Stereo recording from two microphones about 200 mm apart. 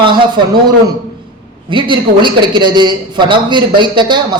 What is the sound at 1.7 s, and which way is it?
A man's voice, 25° right (ahead or behind).